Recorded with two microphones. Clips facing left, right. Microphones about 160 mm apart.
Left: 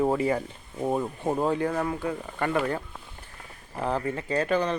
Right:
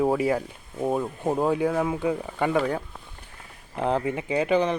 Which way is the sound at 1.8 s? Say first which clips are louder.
Right 4 dB; 15° right (ahead or behind).